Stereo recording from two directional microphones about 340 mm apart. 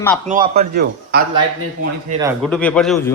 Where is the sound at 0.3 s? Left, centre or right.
Right.